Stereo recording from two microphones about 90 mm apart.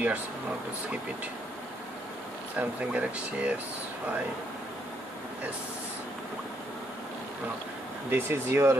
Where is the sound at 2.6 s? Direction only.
15° right (ahead or behind).